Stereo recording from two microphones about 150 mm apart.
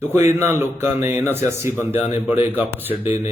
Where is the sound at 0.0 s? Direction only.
20° right (ahead or behind).